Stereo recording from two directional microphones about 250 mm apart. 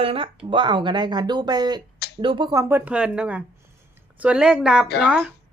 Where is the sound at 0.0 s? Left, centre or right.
Right; by 5.3 s centre.